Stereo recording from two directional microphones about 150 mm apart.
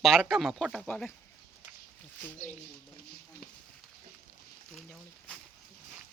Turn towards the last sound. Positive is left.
turn(degrees=5)  # may be behind; listen again after turning